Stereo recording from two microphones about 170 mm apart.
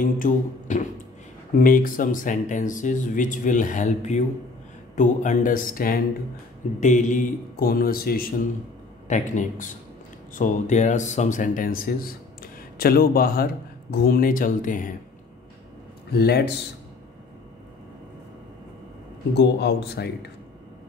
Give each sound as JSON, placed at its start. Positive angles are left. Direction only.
{"t": 0.0, "sound": "speech", "side_deg": 50}
{"t": 9.0, "sound": "speech", "side_deg": 45}
{"t": 16.1, "sound": "a man's voice", "side_deg": 70}
{"t": 19.3, "sound": "a man's voice", "side_deg": 80}